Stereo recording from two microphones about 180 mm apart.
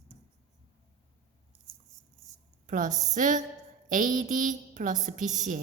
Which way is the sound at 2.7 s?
45° right (ahead or behind).